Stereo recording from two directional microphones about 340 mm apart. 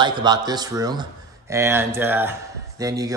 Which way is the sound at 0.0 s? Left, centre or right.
Centre.